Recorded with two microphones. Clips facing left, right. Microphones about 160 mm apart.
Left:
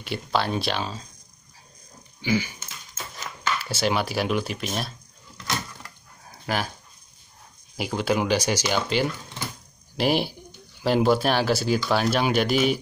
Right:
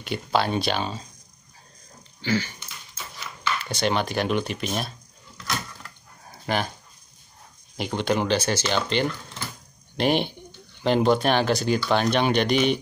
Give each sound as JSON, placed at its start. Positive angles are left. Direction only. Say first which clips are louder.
{"t": 0.0, "sound": "speech", "louder": "right 2 dB", "side_deg": 0}
{"t": 2.2, "sound": "speech", "louder": "left 1 dB", "side_deg": 10}
{"t": 2.6, "sound": "a sound", "louder": "left 1 dB", "side_deg": 45}
{"t": 3.5, "sound": "speech", "louder": "even", "side_deg": 5}
{"t": 6.2, "sound": "dog", "louder": "right 1 dB", "side_deg": 0}
{"t": 7.7, "sound": "speech", "louder": "even", "side_deg": 5}